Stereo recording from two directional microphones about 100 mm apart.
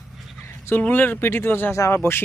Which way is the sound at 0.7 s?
20° left (ahead or behind).